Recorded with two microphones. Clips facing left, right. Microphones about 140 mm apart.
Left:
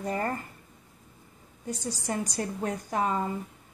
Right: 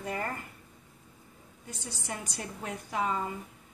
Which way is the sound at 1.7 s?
40° left (ahead or behind).